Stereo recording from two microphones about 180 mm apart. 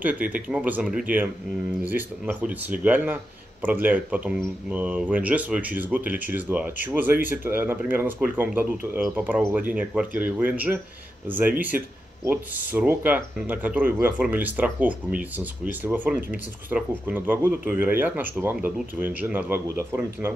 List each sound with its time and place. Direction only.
0.0 s speech: 10° right (ahead or behind)